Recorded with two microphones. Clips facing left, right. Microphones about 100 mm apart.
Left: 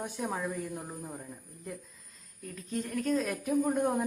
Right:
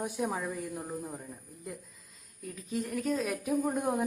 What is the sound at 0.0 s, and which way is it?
A woman's voice, 5° right (ahead or behind).